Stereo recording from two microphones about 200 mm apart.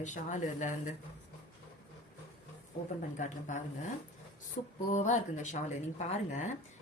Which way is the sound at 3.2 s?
40° left (ahead or behind).